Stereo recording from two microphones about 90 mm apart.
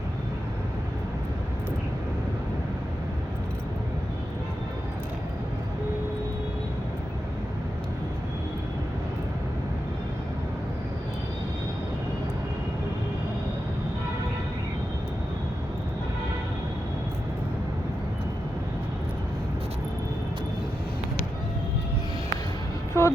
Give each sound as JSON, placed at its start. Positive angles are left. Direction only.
{"t": 23.0, "sound": "vehicle", "side_deg": 30}